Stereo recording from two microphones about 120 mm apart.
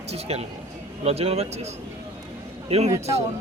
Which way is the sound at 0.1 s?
60° right (ahead or behind).